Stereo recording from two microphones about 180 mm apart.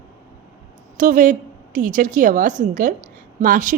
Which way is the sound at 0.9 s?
45° right (ahead or behind).